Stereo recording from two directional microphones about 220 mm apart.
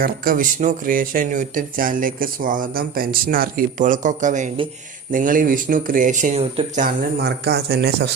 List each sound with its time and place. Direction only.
0.0 s speech: 40° right (ahead or behind)
6.8 s speech: 45° right (ahead or behind)